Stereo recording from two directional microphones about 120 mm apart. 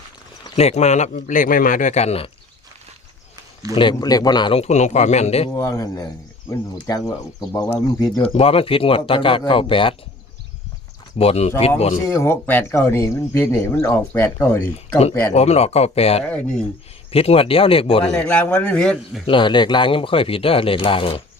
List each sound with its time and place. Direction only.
0.5 s speech: 65° left (ahead or behind)
3.8 s speech: 40° left (ahead or behind)
4.5 s speech: 65° left (ahead or behind)
5.5 s speech: 25° left (ahead or behind)
8.2 s speech: 55° left (ahead or behind)
11.2 s speech: 60° left (ahead or behind)
12.1 s speech: 20° left (ahead or behind)
15.3 s speech: 65° left (ahead or behind)
16.2 s a man's voice: 10° left (ahead or behind)
17.1 s speech: 55° left (ahead or behind)
18.0 s a man's voice: 10° left (ahead or behind)
19.2 s speech: 45° left (ahead or behind)